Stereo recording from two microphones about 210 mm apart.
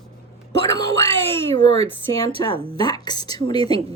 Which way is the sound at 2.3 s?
25° right (ahead or behind).